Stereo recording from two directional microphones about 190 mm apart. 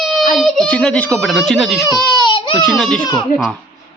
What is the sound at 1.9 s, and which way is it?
Speech, 20° left (ahead or behind).